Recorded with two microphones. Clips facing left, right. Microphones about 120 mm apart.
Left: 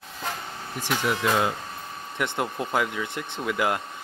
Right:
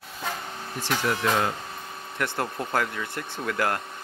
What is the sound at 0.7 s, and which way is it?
Speech, 15° left (ahead or behind).